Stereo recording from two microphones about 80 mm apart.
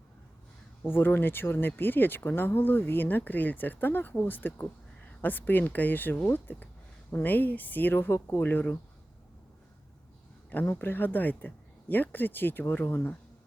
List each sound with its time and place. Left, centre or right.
0.9 s speech: left
10.5 s speech: left